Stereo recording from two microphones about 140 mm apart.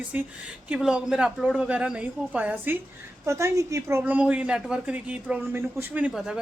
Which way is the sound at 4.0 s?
10° right (ahead or behind).